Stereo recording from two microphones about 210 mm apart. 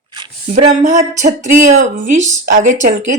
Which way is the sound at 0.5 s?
35° right (ahead or behind).